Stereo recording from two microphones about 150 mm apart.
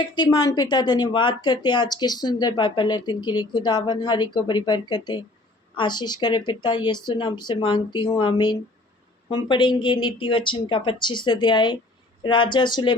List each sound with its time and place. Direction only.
0.2 s a woman's voice: 25° left (ahead or behind)